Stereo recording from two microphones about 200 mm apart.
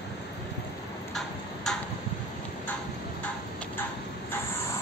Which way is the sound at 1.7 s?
Centre (ahead or behind).